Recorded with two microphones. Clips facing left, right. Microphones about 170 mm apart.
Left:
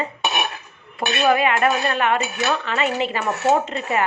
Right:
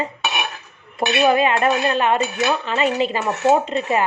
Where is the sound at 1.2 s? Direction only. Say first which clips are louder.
Right 1 dB; 25° right (ahead or behind).